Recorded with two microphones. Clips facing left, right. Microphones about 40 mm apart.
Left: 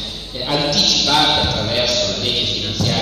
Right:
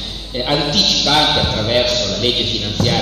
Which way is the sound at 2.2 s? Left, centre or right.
Right.